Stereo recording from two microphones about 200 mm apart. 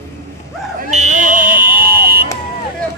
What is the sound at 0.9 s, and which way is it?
Fire alarm, 40° right (ahead or behind).